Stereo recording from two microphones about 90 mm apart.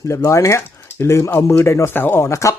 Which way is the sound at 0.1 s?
35° left (ahead or behind).